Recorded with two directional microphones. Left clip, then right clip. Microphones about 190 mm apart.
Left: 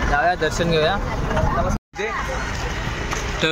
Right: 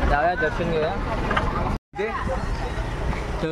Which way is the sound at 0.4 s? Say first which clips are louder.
Left 4 dB; 20° left (ahead or behind).